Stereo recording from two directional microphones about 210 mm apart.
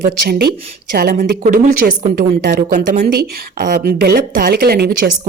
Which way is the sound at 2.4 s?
50° right (ahead or behind).